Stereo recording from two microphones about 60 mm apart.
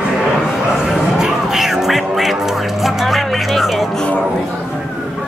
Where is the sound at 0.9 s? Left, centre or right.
Centre.